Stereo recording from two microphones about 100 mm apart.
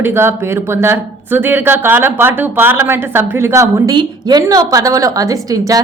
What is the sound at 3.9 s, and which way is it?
A woman's voice, 45° right (ahead or behind).